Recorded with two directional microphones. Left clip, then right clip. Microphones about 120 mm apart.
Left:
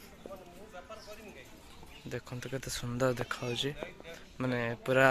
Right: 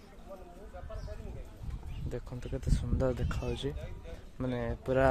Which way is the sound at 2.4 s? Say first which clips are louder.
Left 2 dB; 15° right (ahead or behind).